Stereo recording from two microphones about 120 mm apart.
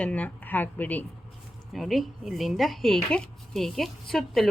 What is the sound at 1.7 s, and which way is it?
A woman's voice, centre (ahead or behind).